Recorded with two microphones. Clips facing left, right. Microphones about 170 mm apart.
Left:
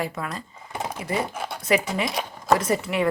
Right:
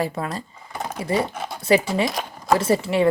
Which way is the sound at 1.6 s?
30° right (ahead or behind).